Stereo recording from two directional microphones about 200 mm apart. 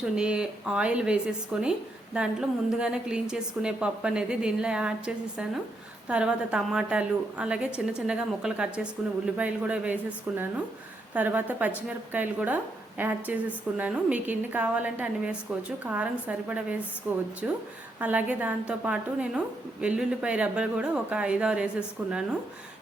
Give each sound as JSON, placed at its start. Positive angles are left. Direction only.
{"t": 0.0, "sound": "a woman's voice", "side_deg": -5}